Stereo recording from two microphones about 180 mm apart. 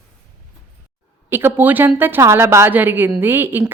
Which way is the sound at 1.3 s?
10° right (ahead or behind).